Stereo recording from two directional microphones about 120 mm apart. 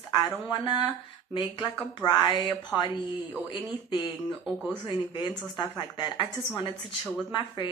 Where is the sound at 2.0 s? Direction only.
35° left (ahead or behind).